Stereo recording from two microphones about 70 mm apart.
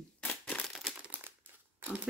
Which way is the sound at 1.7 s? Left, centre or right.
Right.